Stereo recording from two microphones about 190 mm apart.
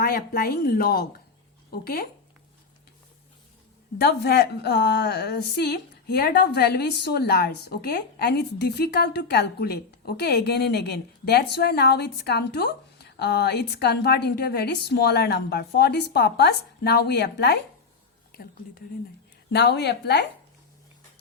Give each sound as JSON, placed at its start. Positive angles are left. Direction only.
{"t": 0.0, "sound": "speech", "side_deg": 50}
{"t": 4.0, "sound": "a woman's voice", "side_deg": 60}
{"t": 18.3, "sound": "a sound", "side_deg": 55}
{"t": 19.5, "sound": "a woman's voice", "side_deg": 60}